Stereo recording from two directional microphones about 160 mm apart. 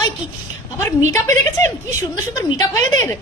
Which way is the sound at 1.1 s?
15° left (ahead or behind).